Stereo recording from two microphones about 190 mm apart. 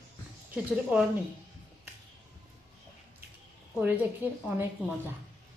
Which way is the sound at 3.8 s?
10° right (ahead or behind).